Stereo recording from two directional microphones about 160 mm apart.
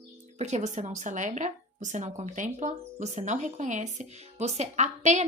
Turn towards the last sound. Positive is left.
turn(degrees=-45)  # may be behind; listen again after turning